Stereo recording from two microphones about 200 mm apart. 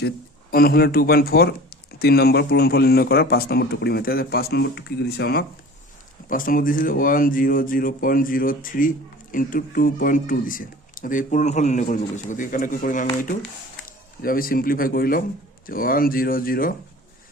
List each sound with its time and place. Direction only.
0.5 s speech: 50° left (ahead or behind)